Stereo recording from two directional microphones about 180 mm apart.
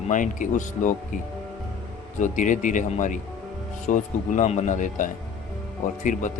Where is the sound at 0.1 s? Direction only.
45° left (ahead or behind).